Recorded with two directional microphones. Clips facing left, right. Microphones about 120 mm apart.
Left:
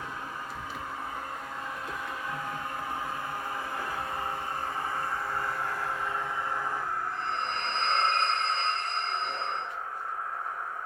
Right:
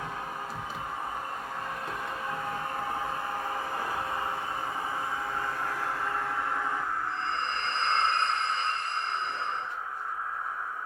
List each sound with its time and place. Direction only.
7.8 s train: 60° left (ahead or behind)